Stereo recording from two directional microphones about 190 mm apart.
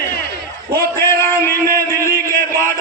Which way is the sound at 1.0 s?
15° left (ahead or behind).